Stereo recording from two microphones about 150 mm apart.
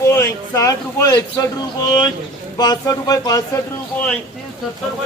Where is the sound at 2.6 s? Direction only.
25° left (ahead or behind).